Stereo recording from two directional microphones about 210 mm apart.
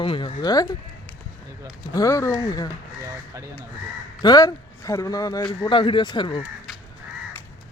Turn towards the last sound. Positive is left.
turn(degrees=20)  # may be behind; listen again after turning